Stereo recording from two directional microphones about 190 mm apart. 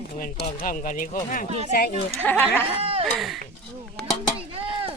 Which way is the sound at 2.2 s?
10° left (ahead or behind).